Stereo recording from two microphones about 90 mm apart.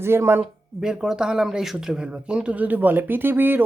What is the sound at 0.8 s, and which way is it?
Speech, 5° right (ahead or behind).